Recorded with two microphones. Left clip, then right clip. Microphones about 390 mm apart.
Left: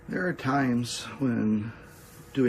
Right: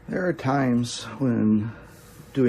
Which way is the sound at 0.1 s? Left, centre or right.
Centre.